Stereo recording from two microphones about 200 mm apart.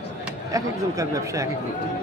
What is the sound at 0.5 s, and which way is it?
Speech, 15° right (ahead or behind).